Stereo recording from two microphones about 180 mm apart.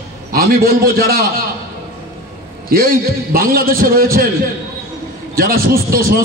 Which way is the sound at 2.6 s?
55° right (ahead or behind).